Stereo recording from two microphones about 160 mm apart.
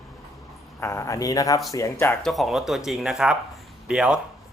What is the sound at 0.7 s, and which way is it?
Speech, 15° left (ahead or behind).